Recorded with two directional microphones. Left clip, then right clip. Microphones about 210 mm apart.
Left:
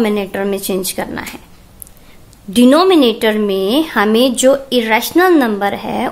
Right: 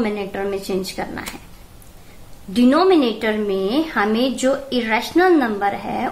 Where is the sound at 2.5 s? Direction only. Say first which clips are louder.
Left 5 dB; 45° left (ahead or behind).